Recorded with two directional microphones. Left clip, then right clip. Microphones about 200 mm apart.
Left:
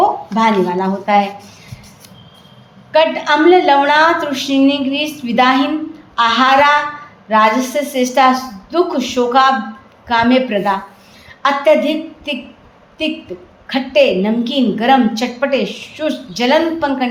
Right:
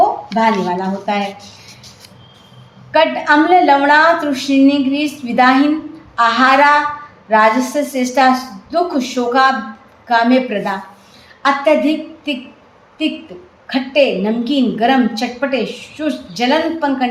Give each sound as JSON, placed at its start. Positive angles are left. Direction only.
{"t": 0.3, "sound": "a woman's voice", "side_deg": 25}
{"t": 2.9, "sound": "a woman's voice", "side_deg": 20}
{"t": 13.7, "sound": "a woman's voice", "side_deg": 25}